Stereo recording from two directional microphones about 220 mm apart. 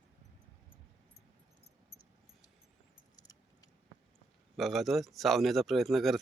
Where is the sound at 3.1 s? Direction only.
15° left (ahead or behind).